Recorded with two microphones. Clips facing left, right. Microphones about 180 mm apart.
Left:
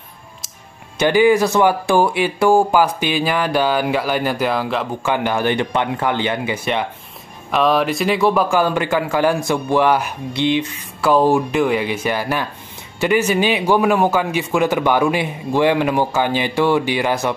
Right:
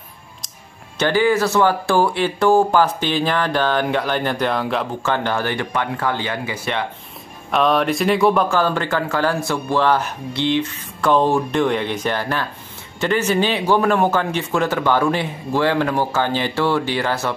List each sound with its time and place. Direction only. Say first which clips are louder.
0.9 s a man's voice: left 4 dB; 15° left (ahead or behind)
5.0 s speech: left 5 dB; 10° left (ahead or behind)
7.5 s speech: left 1 dB; centre (ahead or behind)
8.5 s a man's voice: left 2 dB; 10° left (ahead or behind)